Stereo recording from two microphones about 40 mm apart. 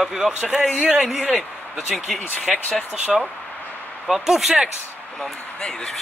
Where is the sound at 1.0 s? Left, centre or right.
Centre.